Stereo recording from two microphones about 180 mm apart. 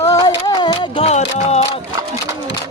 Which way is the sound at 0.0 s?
20° left (ahead or behind).